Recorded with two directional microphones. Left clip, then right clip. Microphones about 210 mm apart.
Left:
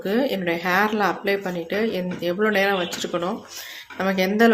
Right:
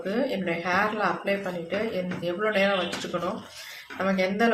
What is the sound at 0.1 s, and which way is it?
Speech, 50° left (ahead or behind).